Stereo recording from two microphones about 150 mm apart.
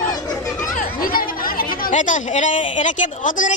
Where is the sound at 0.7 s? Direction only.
70° left (ahead or behind).